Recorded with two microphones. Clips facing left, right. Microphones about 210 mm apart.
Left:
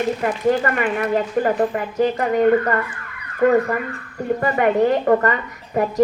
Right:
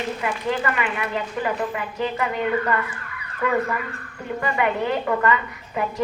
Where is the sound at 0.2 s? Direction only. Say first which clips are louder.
Left 6 dB; 45° left (ahead or behind).